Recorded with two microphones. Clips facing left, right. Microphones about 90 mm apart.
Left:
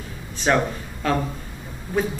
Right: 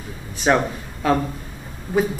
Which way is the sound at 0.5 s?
10° right (ahead or behind).